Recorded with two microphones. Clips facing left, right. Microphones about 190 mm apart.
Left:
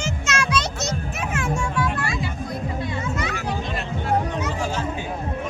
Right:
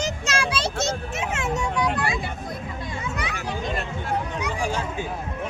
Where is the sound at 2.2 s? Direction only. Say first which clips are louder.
Left 4 dB; 50° right (ahead or behind).